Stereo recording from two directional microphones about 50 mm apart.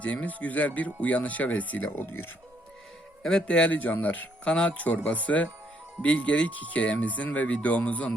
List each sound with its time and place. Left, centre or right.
0.0 s speech: left
3.4 s speech: left
4.4 s speech: left